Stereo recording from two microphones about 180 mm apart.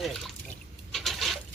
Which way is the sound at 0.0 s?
Centre (ahead or behind).